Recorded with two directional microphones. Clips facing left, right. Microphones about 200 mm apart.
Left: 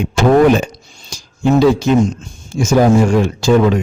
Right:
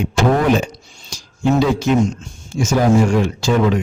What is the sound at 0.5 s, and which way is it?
Speech, 45° left (ahead or behind).